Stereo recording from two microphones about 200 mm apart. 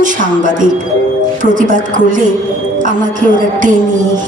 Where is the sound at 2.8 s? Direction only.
40° right (ahead or behind).